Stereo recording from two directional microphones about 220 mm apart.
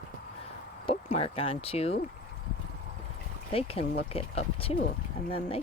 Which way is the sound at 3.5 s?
25° left (ahead or behind).